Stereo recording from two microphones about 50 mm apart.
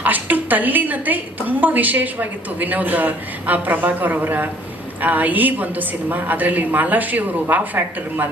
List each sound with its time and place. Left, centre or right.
0.0 s a woman's voice: right